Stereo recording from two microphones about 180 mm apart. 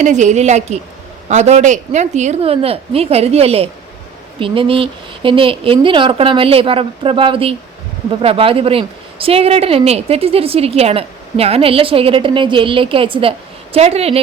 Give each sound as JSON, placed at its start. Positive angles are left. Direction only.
{"t": 0.0, "sound": "a woman's voice", "side_deg": -40}